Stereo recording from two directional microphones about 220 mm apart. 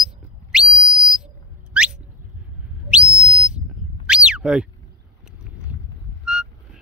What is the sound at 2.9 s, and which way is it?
Whistle, 5° right (ahead or behind).